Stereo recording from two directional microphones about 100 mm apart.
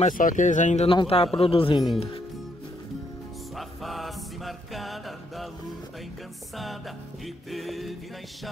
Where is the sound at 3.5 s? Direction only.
Centre (ahead or behind).